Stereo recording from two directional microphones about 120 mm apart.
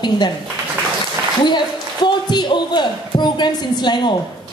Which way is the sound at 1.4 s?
40° left (ahead or behind).